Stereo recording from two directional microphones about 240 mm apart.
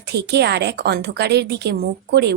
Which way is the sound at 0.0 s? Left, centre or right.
Right.